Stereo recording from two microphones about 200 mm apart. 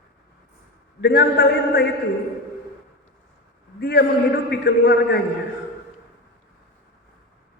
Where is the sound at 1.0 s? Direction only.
55° left (ahead or behind).